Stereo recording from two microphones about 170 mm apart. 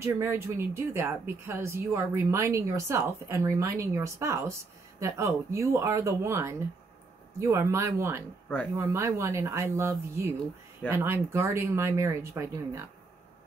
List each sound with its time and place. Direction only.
0.0 s speech: 15° right (ahead or behind)